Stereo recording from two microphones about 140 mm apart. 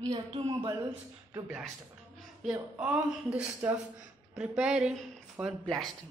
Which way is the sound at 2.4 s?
5° right (ahead or behind).